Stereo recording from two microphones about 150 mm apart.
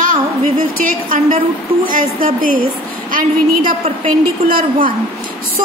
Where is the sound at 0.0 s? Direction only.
60° right (ahead or behind).